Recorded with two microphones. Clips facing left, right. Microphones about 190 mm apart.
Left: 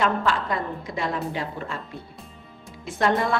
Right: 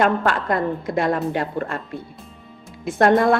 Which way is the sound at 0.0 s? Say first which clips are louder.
Right 4 dB; 55° right (ahead or behind).